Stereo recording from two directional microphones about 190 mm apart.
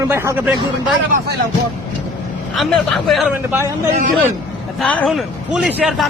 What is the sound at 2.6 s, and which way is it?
Speech, centre (ahead or behind).